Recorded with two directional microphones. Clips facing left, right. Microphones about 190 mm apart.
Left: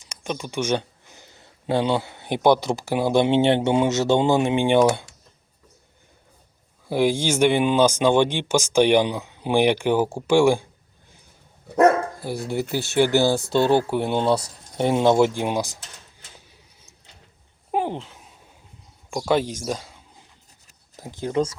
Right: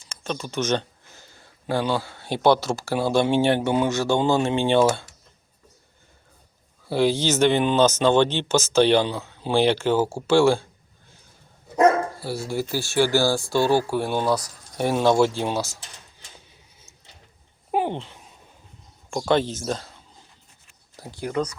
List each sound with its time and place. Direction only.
0.0 s speech: 15° left (ahead or behind)
6.8 s speech: 15° left (ahead or behind)
12.2 s speech: 20° left (ahead or behind)
17.7 s a sound: centre (ahead or behind)
19.1 s speech: 10° left (ahead or behind); by 21.5 s 25° left (ahead or behind)